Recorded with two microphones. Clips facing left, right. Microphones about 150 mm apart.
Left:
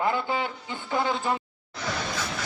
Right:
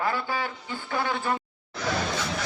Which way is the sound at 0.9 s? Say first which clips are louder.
Left 2 dB; 20° left (ahead or behind).